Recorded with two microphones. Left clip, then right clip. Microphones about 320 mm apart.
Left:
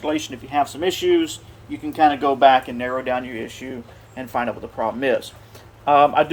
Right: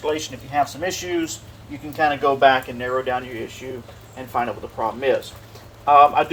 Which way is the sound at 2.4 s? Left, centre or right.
Centre.